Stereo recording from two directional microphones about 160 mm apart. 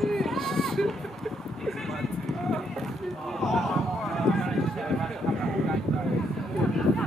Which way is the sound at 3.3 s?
Centre (ahead or behind).